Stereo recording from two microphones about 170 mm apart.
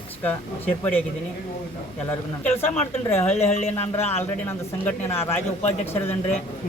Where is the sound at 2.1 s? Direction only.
10° left (ahead or behind).